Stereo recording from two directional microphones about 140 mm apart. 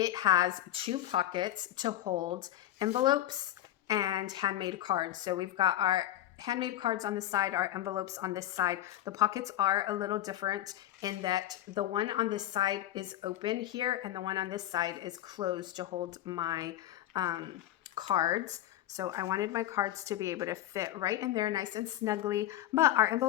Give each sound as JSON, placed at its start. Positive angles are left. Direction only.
{"t": 0.0, "sound": "a woman's voice", "side_deg": -25}